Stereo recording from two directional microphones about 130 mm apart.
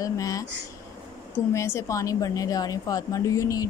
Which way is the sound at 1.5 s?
20° left (ahead or behind).